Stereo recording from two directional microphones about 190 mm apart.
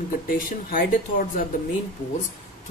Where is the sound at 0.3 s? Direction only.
50° left (ahead or behind).